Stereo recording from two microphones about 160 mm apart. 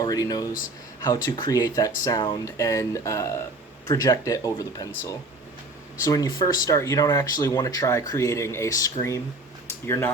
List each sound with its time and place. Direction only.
0.0 s speech: 25° left (ahead or behind)